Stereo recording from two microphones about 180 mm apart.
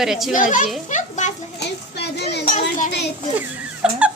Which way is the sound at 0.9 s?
40° left (ahead or behind).